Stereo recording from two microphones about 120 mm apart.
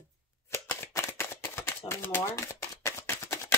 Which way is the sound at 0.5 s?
20° left (ahead or behind).